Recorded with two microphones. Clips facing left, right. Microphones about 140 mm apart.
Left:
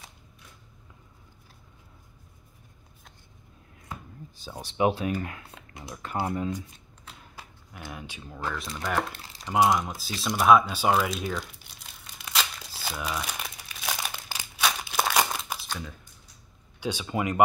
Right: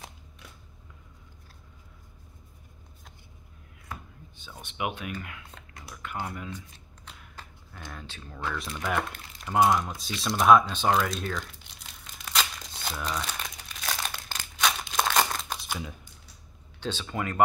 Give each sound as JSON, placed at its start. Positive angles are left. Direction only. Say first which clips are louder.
{"t": 4.4, "sound": "speech", "louder": "left 8 dB", "side_deg": 35}
{"t": 7.3, "sound": "speech", "louder": "left 2 dB", "side_deg": 10}
{"t": 8.5, "sound": "speech", "louder": "even", "side_deg": 0}
{"t": 10.2, "sound": "crumpling", "louder": "even", "side_deg": 0}
{"t": 16.8, "sound": "speech", "louder": "left 3 dB", "side_deg": 15}